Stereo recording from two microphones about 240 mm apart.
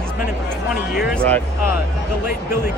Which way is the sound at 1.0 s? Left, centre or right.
Centre.